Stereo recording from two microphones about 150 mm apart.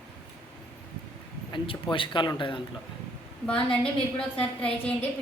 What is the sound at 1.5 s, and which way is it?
Speech, 35° left (ahead or behind).